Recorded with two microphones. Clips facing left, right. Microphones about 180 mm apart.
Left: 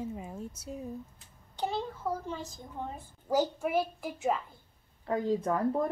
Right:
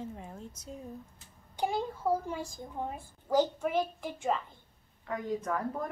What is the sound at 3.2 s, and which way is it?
A child's voice, 10° left (ahead or behind).